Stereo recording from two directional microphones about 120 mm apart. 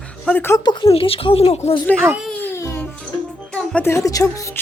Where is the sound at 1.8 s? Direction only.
10° left (ahead or behind).